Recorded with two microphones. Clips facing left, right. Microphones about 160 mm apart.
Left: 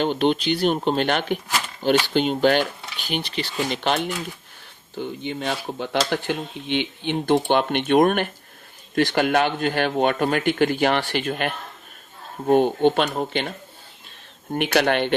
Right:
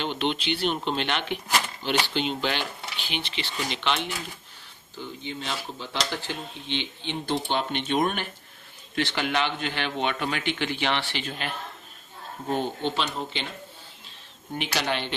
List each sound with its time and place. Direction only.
0.0 s a man's voice: 45° left (ahead or behind)
4.9 s a man's voice: 60° left (ahead or behind)
14.5 s speech: 55° left (ahead or behind)